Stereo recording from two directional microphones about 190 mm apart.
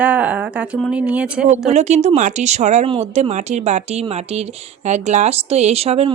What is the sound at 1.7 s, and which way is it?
A woman's voice, 35° right (ahead or behind).